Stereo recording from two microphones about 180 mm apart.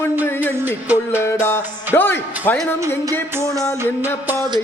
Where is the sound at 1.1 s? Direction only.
15° left (ahead or behind).